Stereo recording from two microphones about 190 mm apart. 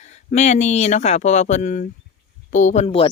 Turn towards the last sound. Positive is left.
turn(degrees=30)  # may be behind; listen again after turning